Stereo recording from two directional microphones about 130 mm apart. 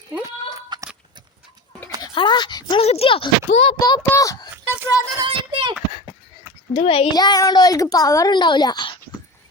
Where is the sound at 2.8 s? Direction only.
50° left (ahead or behind).